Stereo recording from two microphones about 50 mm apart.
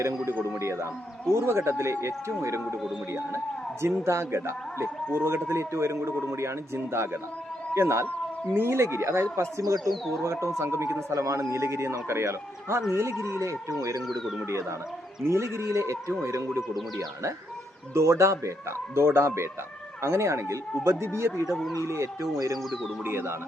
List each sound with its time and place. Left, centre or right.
0.3 s speech: right
0.6 s a man's voice: right
8.0 s a sound: left
8.5 s a man's voice: right
13.4 s speech: right
14.4 s speech: right
17.9 s speech: right
18.9 s a man's voice: right
21.0 s a man's voice: right
21.4 s speech: centre
21.8 s speech: right
23.0 s a man's voice: right